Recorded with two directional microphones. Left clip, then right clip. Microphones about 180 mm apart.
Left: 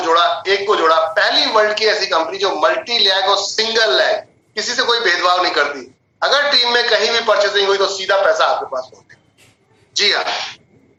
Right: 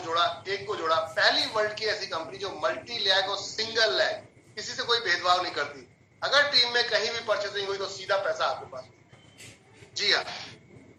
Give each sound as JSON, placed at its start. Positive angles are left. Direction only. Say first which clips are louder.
{"t": 0.0, "sound": "a man's voice", "louder": "left 13 dB", "side_deg": 45}
{"t": 9.9, "sound": "a man's voice", "louder": "left 11 dB", "side_deg": 45}